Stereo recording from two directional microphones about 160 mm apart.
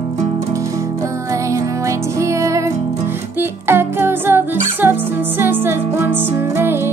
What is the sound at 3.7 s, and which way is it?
Music, 15° right (ahead or behind).